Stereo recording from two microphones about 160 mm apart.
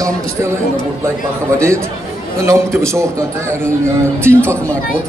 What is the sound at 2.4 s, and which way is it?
Speech, 15° right (ahead or behind).